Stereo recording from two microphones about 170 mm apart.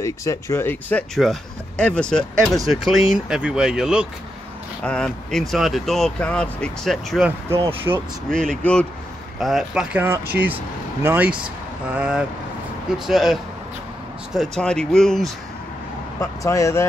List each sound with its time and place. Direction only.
0.0 s speech: 15° left (ahead or behind); by 7.2 s centre (ahead or behind)
8.3 s speech: 5° left (ahead or behind)
16.2 s speech: 20° left (ahead or behind)